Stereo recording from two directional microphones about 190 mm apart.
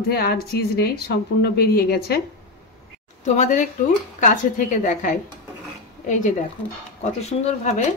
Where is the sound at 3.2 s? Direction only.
40° left (ahead or behind).